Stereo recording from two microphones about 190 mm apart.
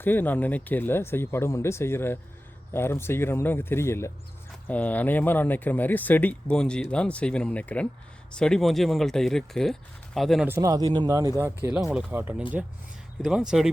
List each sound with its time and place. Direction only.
0.0 s speech: 10° left (ahead or behind)
10.5 s speech: 20° right (ahead or behind)
11.8 s speech: 5° right (ahead or behind)